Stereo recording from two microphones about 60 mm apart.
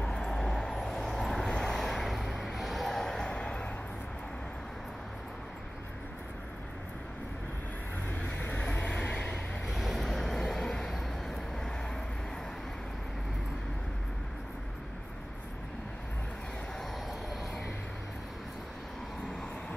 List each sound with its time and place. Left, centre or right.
0.0 s vehicle: centre
8.1 s vehicle: left
9.7 s vehicle: centre